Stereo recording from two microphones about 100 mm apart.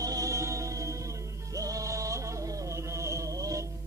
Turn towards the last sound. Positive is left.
turn(degrees=-30)  # may be behind; listen again after turning